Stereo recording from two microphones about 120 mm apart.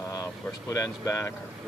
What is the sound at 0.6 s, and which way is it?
Speech, 25° left (ahead or behind).